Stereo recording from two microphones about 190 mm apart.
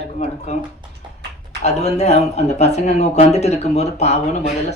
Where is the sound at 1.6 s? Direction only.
35° left (ahead or behind).